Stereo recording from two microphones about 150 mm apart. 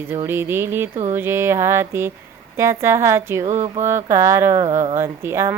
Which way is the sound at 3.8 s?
15° right (ahead or behind).